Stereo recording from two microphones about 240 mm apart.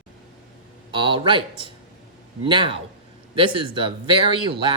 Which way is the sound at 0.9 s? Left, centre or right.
Right.